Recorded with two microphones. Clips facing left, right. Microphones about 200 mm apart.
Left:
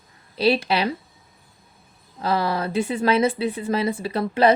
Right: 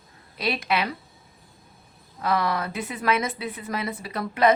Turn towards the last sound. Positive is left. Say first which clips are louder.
# left 4 dB
turn(degrees=30)  # may be behind; listen again after turning